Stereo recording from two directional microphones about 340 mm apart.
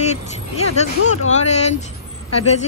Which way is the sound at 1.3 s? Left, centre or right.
Centre.